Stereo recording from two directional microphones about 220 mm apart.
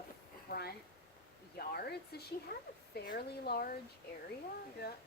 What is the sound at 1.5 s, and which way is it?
Speech, 45° left (ahead or behind).